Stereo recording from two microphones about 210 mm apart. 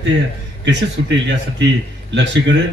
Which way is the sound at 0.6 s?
55° right (ahead or behind).